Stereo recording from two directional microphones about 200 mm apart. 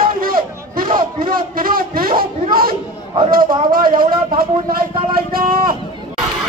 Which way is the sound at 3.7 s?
45° right (ahead or behind).